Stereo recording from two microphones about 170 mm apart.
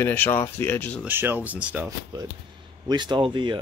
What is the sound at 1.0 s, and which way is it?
Speech, 10° right (ahead or behind).